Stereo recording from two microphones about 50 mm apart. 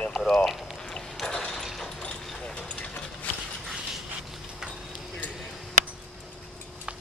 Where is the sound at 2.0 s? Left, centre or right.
Left.